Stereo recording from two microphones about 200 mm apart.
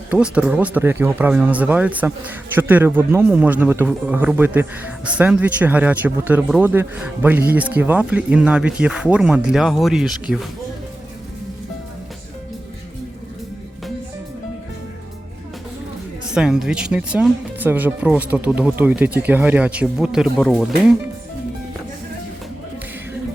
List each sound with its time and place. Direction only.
0.1 s speech: 5° right (ahead or behind)
16.3 s speech: 5° right (ahead or behind)